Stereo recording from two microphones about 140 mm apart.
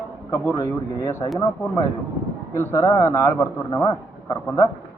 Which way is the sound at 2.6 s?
20° left (ahead or behind).